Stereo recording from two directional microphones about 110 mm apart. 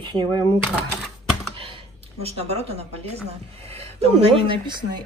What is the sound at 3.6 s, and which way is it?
A woman's voice, 70° right (ahead or behind).